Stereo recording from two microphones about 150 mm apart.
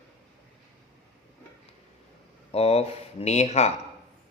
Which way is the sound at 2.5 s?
45° left (ahead or behind).